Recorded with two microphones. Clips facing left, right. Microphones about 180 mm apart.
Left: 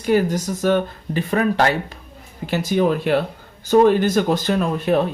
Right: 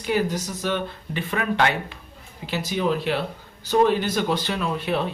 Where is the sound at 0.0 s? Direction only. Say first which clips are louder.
Left 6 dB; 45° left (ahead or behind).